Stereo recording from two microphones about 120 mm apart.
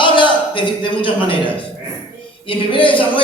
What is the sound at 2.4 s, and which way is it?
Speech, 45° left (ahead or behind).